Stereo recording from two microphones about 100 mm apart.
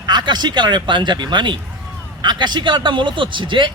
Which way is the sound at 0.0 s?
45° right (ahead or behind).